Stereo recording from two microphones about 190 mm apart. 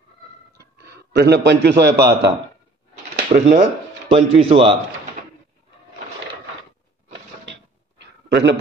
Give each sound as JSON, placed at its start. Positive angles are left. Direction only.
{"t": 0.6, "sound": "a man's voice", "side_deg": -60}
{"t": 3.3, "sound": "speech", "side_deg": -30}
{"t": 8.0, "sound": "a sound", "side_deg": -65}